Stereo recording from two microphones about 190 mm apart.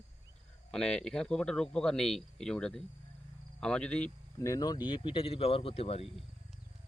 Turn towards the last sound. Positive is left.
turn(degrees=30)  # may be behind; listen again after turning